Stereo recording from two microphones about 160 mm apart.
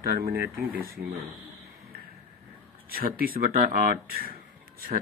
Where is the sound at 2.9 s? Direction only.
65° right (ahead or behind).